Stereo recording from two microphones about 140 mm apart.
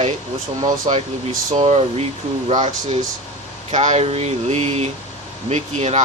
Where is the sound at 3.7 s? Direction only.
55° right (ahead or behind).